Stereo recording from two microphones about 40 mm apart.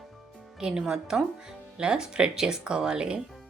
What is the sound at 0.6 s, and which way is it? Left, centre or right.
Speech, centre.